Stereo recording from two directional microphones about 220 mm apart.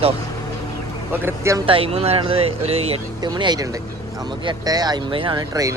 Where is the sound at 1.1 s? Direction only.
10° right (ahead or behind).